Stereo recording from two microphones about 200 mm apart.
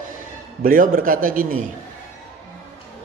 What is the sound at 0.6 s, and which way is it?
Speech, 45° right (ahead or behind).